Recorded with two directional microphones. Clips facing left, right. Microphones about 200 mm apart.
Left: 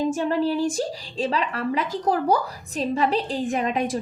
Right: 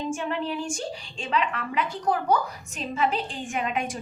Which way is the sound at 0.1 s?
35° left (ahead or behind).